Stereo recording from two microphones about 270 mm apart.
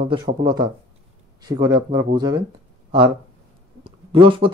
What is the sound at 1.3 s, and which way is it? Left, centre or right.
Speech, centre.